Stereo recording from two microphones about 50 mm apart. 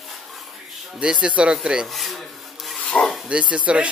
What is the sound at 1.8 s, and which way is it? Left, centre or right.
Rub, centre.